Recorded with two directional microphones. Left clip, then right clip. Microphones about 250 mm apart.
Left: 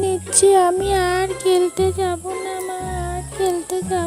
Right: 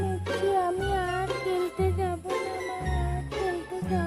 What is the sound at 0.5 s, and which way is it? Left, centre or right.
Music, left.